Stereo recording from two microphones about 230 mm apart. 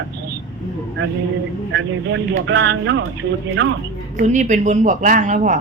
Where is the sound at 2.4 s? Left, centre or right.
Right.